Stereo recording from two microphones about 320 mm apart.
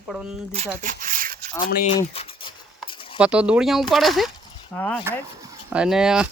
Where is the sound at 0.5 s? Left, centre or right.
Right.